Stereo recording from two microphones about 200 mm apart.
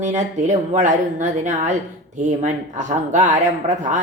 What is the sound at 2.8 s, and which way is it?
Speech, 35° right (ahead or behind).